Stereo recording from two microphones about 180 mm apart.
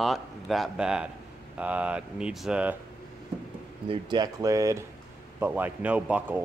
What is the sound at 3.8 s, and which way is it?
Speech, 25° right (ahead or behind).